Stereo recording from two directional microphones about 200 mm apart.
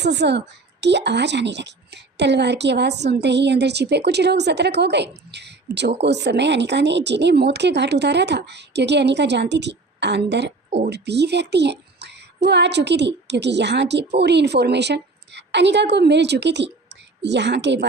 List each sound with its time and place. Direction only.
0.0 s a child's voice: 60° right (ahead or behind)